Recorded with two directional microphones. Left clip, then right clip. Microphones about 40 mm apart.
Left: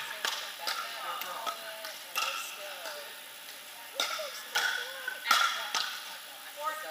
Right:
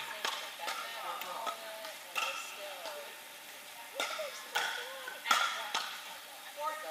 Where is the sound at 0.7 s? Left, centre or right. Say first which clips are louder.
Left 3 dB; left.